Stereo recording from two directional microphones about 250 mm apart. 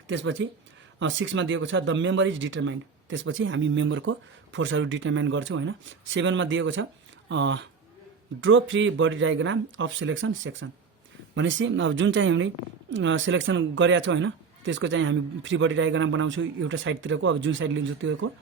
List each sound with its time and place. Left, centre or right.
0.1 s speech: right